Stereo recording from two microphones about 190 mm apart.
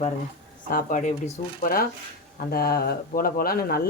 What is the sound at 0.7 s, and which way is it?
Speech, 40° left (ahead or behind).